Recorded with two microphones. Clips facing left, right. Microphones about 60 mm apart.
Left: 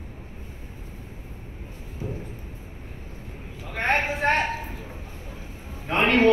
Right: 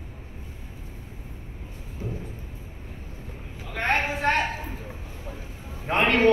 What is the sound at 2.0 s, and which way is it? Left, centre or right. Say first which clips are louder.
Vehicle: left 1 dB; left.